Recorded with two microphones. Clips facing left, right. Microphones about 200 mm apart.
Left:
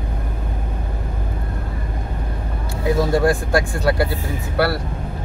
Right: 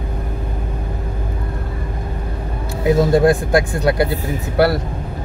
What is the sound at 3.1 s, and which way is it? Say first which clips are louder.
Speech: right 4 dB; 20° right (ahead or behind).